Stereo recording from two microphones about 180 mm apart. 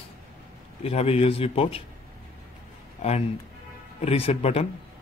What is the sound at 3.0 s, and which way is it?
Speech, 35° left (ahead or behind).